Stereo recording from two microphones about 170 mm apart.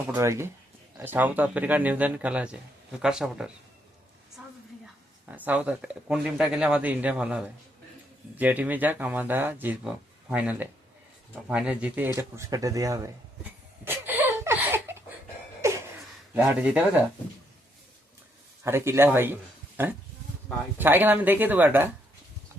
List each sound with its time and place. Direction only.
0.1 s speech: 15° right (ahead or behind)
5.3 s speech: 10° right (ahead or behind)
13.8 s a sound: 10° right (ahead or behind)
16.3 s speech: 10° right (ahead or behind)
18.6 s speech: 15° right (ahead or behind)